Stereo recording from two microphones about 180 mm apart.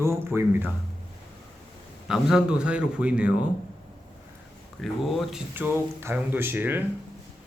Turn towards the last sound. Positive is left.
turn(degrees=-10)  # may be behind; listen again after turning